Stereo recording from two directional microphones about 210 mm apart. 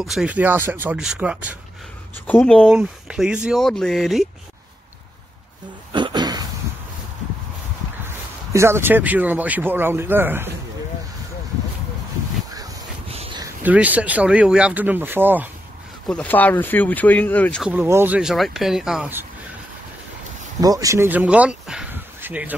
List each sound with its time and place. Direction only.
0.0 s speech: 5° right (ahead or behind)
2.2 s speech: 5° left (ahead or behind)
5.9 s a sound: 20° right (ahead or behind)
8.5 s speech: 10° right (ahead or behind)
13.1 s a sound: 30° right (ahead or behind)
13.4 s speech: 10° right (ahead or behind)
16.1 s speech: 5° left (ahead or behind)
17.6 s speech: 10° right (ahead or behind)
20.6 s speech: 15° right (ahead or behind)